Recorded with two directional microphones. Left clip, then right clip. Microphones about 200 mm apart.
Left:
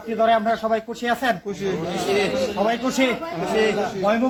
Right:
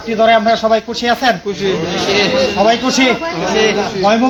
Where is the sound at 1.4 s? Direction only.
60° left (ahead or behind).